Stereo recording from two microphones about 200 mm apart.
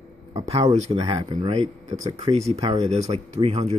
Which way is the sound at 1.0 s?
25° right (ahead or behind).